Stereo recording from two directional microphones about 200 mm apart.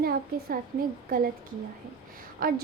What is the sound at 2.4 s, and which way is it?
Speech, 45° right (ahead or behind).